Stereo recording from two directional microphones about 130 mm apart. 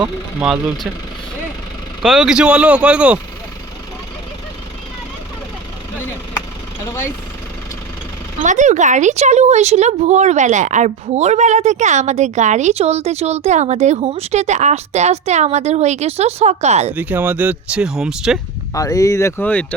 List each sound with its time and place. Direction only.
0.3 s speech: 5° right (ahead or behind)
2.0 s speech: 5° right (ahead or behind)
6.8 s speech: 25° left (ahead or behind)
8.4 s a woman's voice: 70° right (ahead or behind)
16.9 s speech: 10° right (ahead or behind)
18.7 s speech: 25° left (ahead or behind)